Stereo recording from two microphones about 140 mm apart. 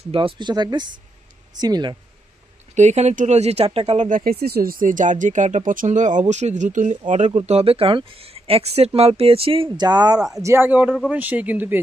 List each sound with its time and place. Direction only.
0.1 s speech: 35° right (ahead or behind)
2.7 s speech: 55° right (ahead or behind)
4.1 s speech: 90° right; by 9.7 s 40° right (ahead or behind)
9.7 s speech: 30° right (ahead or behind); by 11.8 s 10° right (ahead or behind)